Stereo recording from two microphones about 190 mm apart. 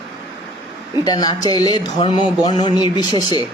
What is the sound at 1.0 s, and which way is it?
Speech, 20° left (ahead or behind).